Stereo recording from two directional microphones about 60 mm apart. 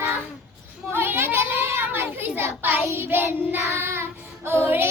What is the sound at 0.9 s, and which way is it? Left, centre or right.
Child singing, right.